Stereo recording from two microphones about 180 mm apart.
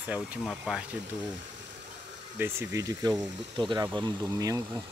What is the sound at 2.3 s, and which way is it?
Speech, 15° right (ahead or behind).